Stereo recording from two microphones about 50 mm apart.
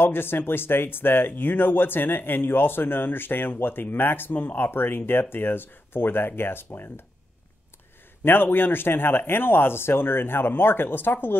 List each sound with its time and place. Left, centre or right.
0.0 s speech: left
8.2 s speech: left